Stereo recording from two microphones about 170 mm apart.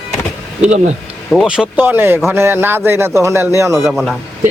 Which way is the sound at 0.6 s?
45° right (ahead or behind).